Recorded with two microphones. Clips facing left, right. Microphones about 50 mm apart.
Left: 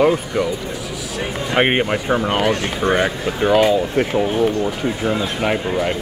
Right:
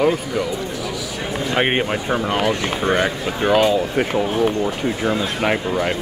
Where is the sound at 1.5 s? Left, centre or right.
Centre.